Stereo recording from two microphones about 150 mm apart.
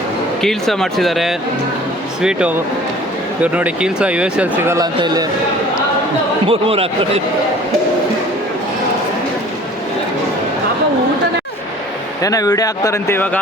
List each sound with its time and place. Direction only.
0.4 s speech: 5° left (ahead or behind); by 4.9 s 15° right (ahead or behind)
4.9 s a man's voice: 25° right (ahead or behind)
6.5 s speech: 40° right (ahead or behind)
12.2 s speech: 25° left (ahead or behind)